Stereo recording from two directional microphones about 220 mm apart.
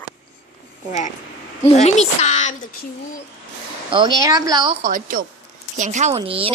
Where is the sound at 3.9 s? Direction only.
20° right (ahead or behind).